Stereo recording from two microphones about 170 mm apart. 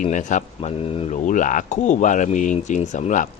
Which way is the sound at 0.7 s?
35° left (ahead or behind).